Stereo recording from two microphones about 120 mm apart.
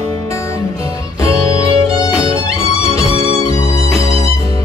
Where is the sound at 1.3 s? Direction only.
25° left (ahead or behind).